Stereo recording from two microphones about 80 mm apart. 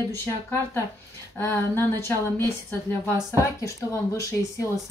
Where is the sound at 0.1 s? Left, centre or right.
Left.